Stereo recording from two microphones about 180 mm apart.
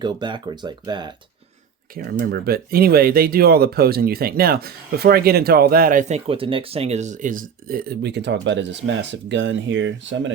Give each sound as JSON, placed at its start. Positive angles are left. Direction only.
{"t": 0.0, "sound": "speech", "side_deg": -25}
{"t": 2.0, "sound": "speech", "side_deg": -60}